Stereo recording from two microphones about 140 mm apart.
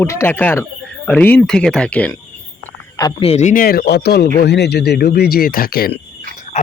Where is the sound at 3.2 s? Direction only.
55° left (ahead or behind); by 5.9 s 90° left.